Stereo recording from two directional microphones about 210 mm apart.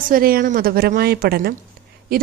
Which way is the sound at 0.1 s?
45° right (ahead or behind).